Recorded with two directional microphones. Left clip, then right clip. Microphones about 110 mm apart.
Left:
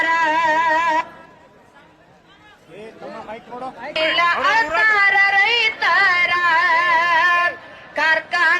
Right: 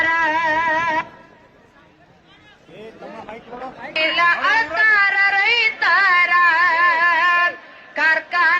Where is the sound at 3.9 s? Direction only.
35° left (ahead or behind).